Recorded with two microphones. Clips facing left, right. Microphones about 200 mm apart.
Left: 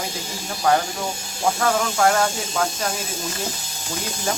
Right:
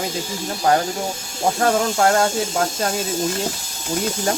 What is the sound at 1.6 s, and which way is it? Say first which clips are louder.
Speech: right 3 dB; 35° right (ahead or behind).